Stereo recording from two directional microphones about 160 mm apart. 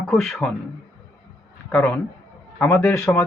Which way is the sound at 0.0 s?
Centre (ahead or behind).